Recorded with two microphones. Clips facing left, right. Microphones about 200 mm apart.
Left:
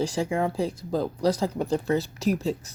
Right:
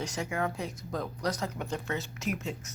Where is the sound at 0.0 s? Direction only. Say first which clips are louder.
Left 7 dB; 30° left (ahead or behind).